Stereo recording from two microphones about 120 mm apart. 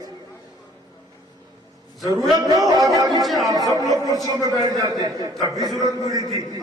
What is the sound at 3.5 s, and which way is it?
Chatter, 30° right (ahead or behind).